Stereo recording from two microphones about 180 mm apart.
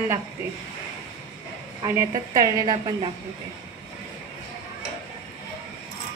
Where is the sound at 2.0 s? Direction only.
20° right (ahead or behind).